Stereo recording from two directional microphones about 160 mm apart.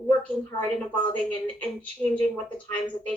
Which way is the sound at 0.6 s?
5° left (ahead or behind).